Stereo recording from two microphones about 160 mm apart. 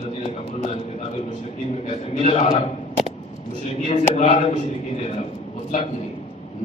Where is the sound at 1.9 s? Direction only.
45° left (ahead or behind).